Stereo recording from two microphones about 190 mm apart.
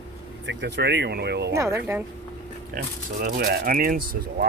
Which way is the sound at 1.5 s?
15° right (ahead or behind).